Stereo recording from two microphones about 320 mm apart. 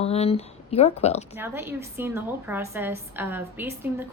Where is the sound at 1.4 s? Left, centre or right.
Centre.